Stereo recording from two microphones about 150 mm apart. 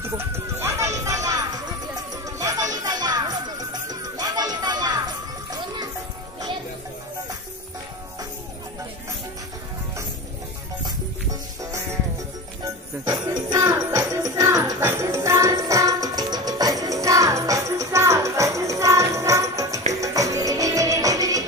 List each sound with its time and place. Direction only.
0.0 s a sound: 15° right (ahead or behind)
2.2 s music: 20° right (ahead or behind)
11.6 s music: 20° right (ahead or behind)
13.0 s music: 25° right (ahead or behind)